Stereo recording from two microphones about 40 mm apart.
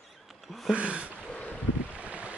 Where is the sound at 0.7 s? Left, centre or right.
Right.